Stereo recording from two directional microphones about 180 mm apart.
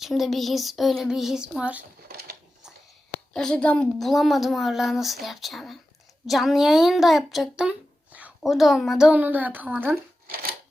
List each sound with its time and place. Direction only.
0.0 s a woman's voice: centre (ahead or behind)
2.0 s a sound: 55° right (ahead or behind)
3.3 s a woman's voice: 5° left (ahead or behind)
10.2 s scissors: 55° right (ahead or behind)